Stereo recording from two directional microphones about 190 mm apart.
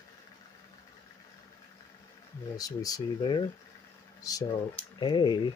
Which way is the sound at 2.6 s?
20° left (ahead or behind).